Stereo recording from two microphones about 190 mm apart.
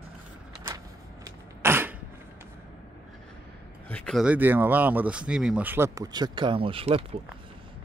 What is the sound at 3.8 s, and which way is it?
Speech, 5° left (ahead or behind).